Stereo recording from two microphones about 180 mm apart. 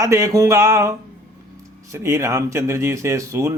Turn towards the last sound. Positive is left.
turn(degrees=-15)  # may be behind; listen again after turning